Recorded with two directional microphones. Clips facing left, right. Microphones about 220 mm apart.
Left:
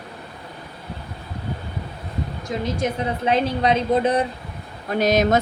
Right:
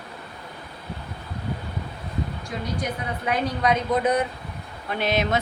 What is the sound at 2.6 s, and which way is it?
Speech, 25° left (ahead or behind).